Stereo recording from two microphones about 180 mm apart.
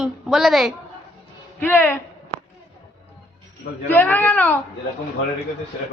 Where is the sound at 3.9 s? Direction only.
10° left (ahead or behind).